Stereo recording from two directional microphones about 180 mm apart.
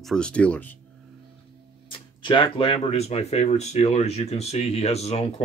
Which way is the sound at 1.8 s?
25° left (ahead or behind).